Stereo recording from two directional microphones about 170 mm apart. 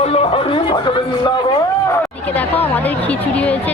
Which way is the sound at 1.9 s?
10° left (ahead or behind).